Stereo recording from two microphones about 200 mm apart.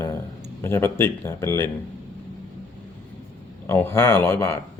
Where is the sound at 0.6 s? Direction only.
10° left (ahead or behind).